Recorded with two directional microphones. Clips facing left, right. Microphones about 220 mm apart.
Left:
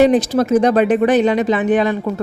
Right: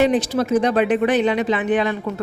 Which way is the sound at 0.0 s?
45° left (ahead or behind).